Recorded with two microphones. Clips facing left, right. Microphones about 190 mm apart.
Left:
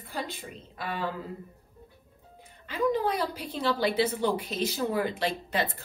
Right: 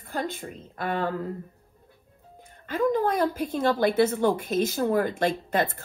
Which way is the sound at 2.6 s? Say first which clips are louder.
Right 3 dB; 50° right (ahead or behind).